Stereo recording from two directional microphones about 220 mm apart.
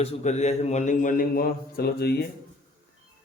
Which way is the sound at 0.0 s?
30° left (ahead or behind).